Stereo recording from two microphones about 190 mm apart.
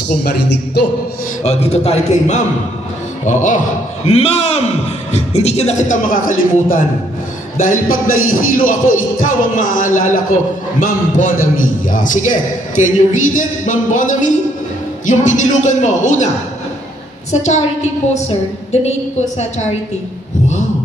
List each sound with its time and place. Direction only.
0.2 s speech: 60° left (ahead or behind)
1.4 s a man's voice: 35° left (ahead or behind)
7.9 s speech: 90° left
8.3 s a man's voice: 45° left (ahead or behind)
17.3 s a man's voice: 35° left (ahead or behind)
18.7 s a man's voice: 35° left (ahead or behind)